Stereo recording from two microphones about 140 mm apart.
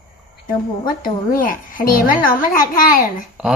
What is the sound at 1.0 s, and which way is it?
A woman's voice, 85° left.